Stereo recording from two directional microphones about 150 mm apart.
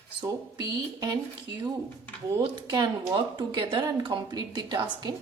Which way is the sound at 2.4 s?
30° right (ahead or behind).